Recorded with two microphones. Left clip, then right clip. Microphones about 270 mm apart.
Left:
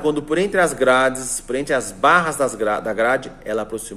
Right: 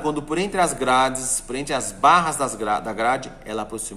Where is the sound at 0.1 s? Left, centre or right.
Centre.